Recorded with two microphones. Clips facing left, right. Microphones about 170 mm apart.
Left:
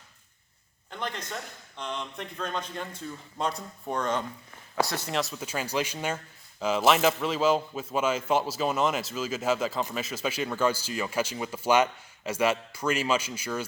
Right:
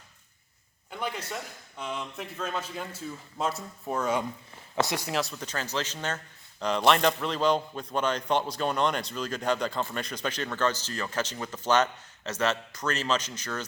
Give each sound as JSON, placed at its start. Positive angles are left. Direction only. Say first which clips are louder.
{"t": 0.9, "sound": "a man's voice", "louder": "right 1 dB", "side_deg": -10}
{"t": 4.7, "sound": "speech", "louder": "even", "side_deg": -20}
{"t": 5.0, "sound": "a man's voice", "louder": "even", "side_deg": 0}